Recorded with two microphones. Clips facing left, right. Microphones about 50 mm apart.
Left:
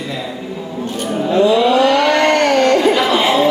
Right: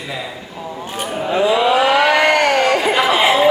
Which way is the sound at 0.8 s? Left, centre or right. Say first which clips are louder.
Left 3 dB; centre.